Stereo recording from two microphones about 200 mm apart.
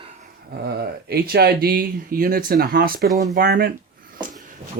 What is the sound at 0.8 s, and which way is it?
Speech, 50° right (ahead or behind).